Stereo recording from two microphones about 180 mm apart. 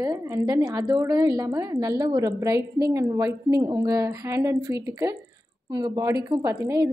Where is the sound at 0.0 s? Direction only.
20° right (ahead or behind).